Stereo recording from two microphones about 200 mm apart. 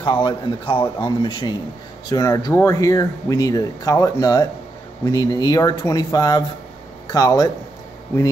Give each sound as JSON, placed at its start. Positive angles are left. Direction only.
{"t": 0.0, "sound": "speech", "side_deg": 25}